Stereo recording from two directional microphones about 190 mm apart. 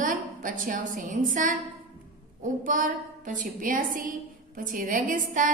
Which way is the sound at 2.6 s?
45° right (ahead or behind).